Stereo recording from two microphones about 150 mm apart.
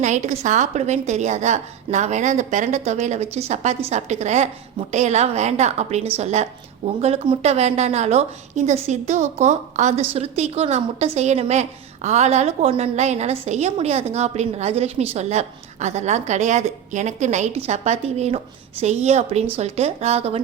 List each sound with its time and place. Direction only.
0.0 s a woman's voice: 50° right (ahead or behind)